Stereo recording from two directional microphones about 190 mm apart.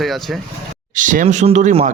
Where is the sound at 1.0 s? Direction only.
45° right (ahead or behind).